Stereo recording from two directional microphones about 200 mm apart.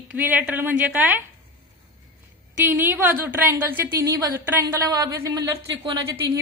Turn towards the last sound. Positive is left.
turn(degrees=-15)  # may be behind; listen again after turning